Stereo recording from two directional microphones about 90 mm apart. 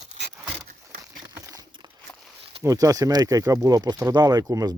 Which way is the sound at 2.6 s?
40° right (ahead or behind).